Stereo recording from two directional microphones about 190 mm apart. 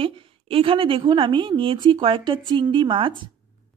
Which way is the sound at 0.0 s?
30° right (ahead or behind).